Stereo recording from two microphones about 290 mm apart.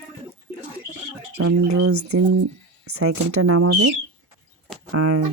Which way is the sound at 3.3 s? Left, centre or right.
Right.